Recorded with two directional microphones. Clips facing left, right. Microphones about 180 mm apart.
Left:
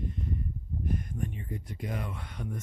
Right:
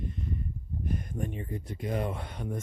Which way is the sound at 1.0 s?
30° right (ahead or behind).